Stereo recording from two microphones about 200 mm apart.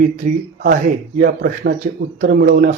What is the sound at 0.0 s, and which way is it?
Speech, 40° right (ahead or behind).